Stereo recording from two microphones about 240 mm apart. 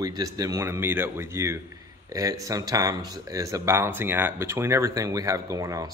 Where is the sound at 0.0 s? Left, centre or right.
Centre.